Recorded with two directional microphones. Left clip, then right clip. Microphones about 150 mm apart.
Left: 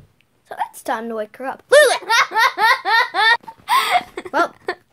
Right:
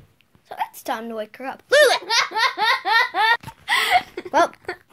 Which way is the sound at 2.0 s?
10° left (ahead or behind).